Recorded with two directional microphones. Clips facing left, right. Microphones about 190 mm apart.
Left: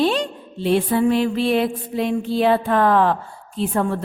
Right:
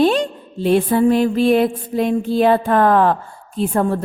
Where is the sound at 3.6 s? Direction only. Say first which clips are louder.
Right 3 dB; 40° right (ahead or behind).